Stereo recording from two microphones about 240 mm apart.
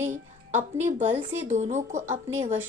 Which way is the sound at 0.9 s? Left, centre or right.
Right.